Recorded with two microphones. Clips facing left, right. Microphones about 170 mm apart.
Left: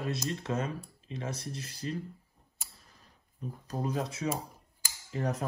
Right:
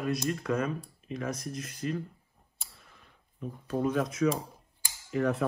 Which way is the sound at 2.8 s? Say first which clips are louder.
Right 2 dB; 35° left (ahead or behind).